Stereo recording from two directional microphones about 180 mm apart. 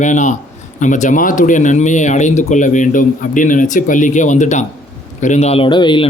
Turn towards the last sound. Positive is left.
turn(degrees=25)  # may be behind; listen again after turning